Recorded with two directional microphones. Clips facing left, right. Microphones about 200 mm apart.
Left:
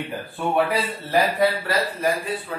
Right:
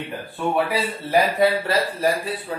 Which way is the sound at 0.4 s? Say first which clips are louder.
Even; centre (ahead or behind).